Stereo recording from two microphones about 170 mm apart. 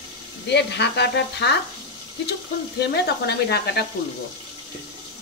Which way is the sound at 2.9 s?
75° left (ahead or behind).